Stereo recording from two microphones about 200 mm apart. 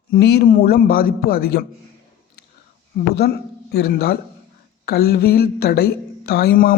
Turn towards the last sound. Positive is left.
turn(degrees=45)  # may be behind; listen again after turning